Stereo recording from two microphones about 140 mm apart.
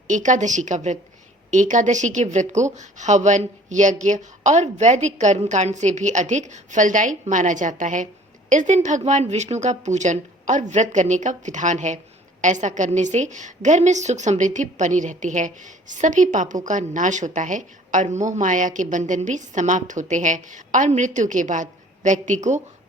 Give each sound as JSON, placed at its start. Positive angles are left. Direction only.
{"t": 0.1, "sound": "a woman's voice", "side_deg": -60}